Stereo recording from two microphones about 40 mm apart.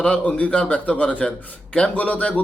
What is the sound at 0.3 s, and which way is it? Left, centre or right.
A man's voice, left.